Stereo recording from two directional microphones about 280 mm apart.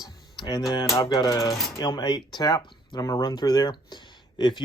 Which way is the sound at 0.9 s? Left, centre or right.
Centre.